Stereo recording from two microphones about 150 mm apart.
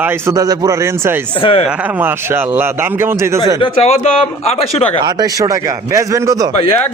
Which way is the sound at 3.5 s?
35° left (ahead or behind).